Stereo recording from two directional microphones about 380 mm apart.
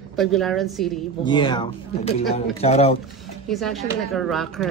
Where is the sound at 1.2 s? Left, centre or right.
Centre.